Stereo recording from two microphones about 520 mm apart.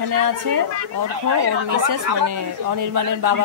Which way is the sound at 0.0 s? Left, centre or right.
Right.